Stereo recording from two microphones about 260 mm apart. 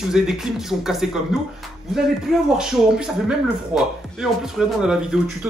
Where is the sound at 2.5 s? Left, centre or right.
Centre.